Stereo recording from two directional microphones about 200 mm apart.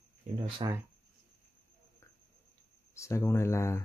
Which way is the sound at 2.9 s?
15° left (ahead or behind).